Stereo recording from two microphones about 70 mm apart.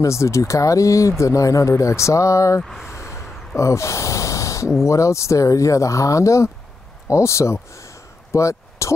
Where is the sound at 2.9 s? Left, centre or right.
Left.